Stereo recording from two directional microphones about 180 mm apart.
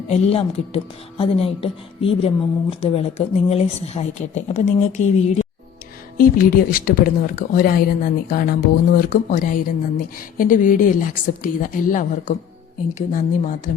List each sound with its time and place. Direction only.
0.1 s speech: 35° left (ahead or behind)
6.1 s speech: 50° left (ahead or behind)